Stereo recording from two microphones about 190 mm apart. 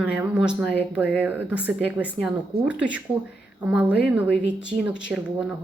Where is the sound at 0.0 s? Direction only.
5° right (ahead or behind).